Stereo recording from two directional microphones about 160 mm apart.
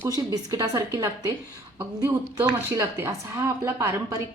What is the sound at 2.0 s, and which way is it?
A woman's voice, 20° right (ahead or behind).